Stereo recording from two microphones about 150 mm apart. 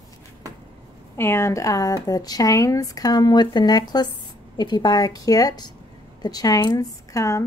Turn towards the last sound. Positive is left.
turn(degrees=20)  # may be behind; listen again after turning